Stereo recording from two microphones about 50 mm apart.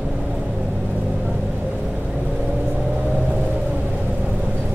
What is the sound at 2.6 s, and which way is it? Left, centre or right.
Vehicle, right.